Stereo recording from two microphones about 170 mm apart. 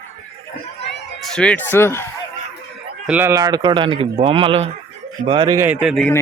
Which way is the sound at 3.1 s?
15° right (ahead or behind).